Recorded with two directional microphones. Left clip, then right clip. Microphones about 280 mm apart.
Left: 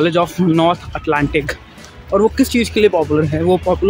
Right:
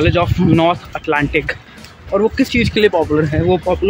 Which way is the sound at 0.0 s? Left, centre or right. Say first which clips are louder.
Even; centre.